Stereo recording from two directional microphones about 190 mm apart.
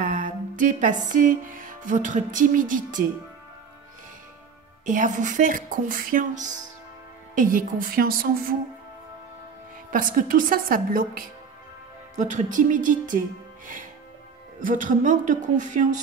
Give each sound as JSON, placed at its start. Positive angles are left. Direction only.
{"t": 0.0, "sound": "music", "side_deg": -45}
{"t": 4.8, "sound": "speech", "side_deg": -40}
{"t": 9.8, "sound": "speech", "side_deg": -45}
{"t": 14.6, "sound": "a woman's voice", "side_deg": -45}